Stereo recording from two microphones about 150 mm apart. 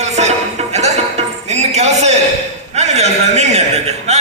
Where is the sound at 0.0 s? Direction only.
50° right (ahead or behind).